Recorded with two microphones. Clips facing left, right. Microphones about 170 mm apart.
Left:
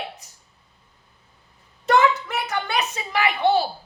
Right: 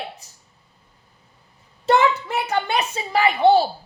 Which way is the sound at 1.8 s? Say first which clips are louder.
Right 1 dB; 25° right (ahead or behind).